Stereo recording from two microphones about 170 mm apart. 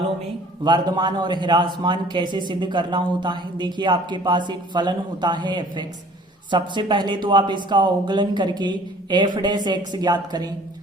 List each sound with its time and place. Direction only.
0.6 s a man's voice: 25° right (ahead or behind)